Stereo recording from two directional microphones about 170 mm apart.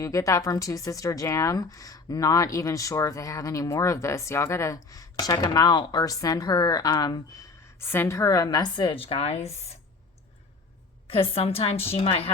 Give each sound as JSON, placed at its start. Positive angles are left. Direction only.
{"t": 0.0, "sound": "speech", "side_deg": 20}
{"t": 7.8, "sound": "speech", "side_deg": 15}
{"t": 11.1, "sound": "a woman's voice", "side_deg": 35}